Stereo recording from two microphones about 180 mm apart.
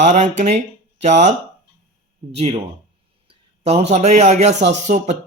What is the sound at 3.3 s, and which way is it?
A man's voice, 35° right (ahead or behind).